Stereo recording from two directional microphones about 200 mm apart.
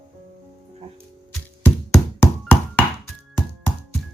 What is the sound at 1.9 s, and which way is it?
Knock, 10° left (ahead or behind).